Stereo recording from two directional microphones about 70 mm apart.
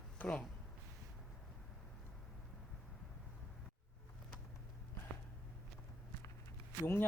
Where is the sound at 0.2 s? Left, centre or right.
Left.